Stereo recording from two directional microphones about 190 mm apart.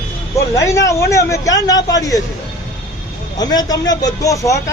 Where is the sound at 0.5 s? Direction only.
15° left (ahead or behind).